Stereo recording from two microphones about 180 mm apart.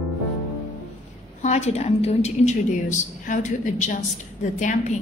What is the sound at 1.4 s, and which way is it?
A woman's voice, 40° left (ahead or behind).